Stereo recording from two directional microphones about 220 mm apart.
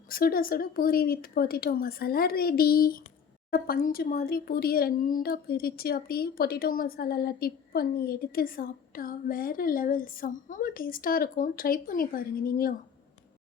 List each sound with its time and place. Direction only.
0.1 s speech: 40° left (ahead or behind)